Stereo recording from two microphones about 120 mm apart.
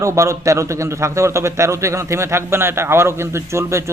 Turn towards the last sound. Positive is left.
turn(degrees=-25)  # may be behind; listen again after turning